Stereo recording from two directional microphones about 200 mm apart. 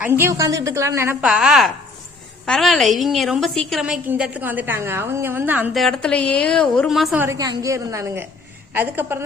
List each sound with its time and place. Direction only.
0.0 s a woman's voice: 10° right (ahead or behind)
7.3 s a woman's voice: 15° right (ahead or behind)